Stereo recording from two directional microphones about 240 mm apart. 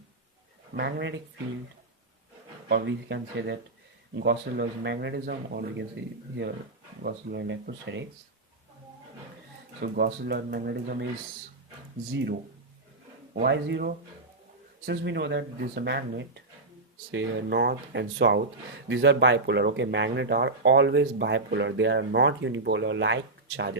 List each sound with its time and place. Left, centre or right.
0.7 s speech: right
2.6 s speech: right
7.0 s speech: right
9.8 s speech: right
12.1 s speech: right
13.4 s speech: right